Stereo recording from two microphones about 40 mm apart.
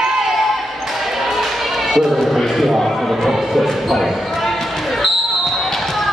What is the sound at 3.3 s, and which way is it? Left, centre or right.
Basketball bounce, centre.